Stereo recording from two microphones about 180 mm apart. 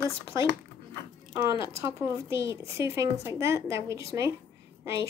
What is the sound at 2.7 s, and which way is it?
Speech, 15° right (ahead or behind).